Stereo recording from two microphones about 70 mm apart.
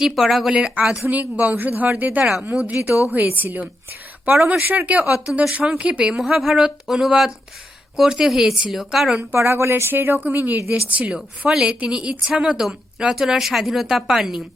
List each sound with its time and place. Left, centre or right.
0.0 s a woman's voice: centre
0.5 s speech: centre
1.0 s speech: right
3.1 s a woman's voice: right; by 9.2 s centre
9.3 s a woman's voice: right; by 14.4 s centre